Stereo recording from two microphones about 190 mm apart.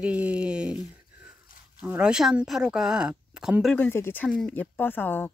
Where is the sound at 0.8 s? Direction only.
5° right (ahead or behind).